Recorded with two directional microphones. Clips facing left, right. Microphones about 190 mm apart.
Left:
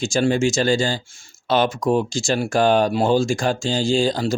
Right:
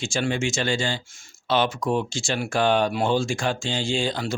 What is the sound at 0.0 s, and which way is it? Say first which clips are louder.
Speech: left 7 dB; 40° left (ahead or behind).